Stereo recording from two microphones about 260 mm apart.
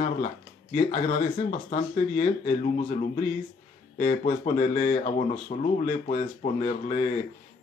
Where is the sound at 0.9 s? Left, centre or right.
Left.